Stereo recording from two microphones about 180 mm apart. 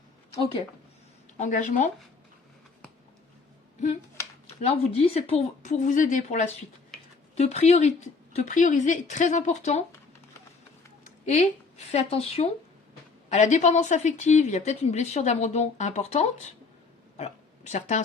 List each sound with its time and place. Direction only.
1.4 s speech: 45° left (ahead or behind)
4.6 s a woman's voice: 35° left (ahead or behind)
11.9 s a woman's voice: 35° left (ahead or behind)